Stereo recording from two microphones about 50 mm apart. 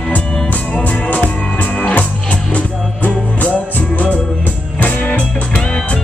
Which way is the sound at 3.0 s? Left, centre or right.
Left.